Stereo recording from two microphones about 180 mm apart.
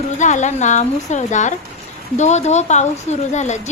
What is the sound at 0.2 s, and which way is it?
A woman's voice, 40° left (ahead or behind).